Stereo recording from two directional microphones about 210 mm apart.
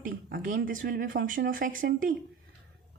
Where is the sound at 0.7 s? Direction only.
40° right (ahead or behind).